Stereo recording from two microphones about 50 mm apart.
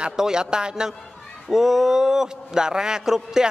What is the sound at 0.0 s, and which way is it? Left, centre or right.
A woman's voice, centre.